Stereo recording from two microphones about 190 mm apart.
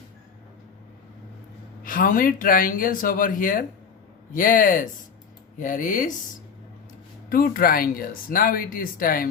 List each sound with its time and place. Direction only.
1.8 s speech: 45° left (ahead or behind)
7.3 s speech: 50° left (ahead or behind)